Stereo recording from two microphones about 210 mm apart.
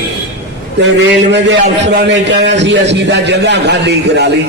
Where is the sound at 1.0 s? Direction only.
55° right (ahead or behind).